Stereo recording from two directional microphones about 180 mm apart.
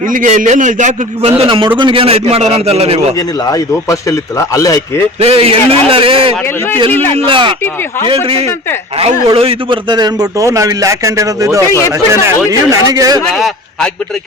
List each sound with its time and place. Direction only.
0.1 s a man's voice: 45° right (ahead or behind)
3.2 s a man's voice: 20° left (ahead or behind)
5.2 s a man's voice: 35° right (ahead or behind)
6.9 s a man's voice: 10° left (ahead or behind)
7.3 s a man's voice: 30° right (ahead or behind)
13.3 s a man's voice: centre (ahead or behind)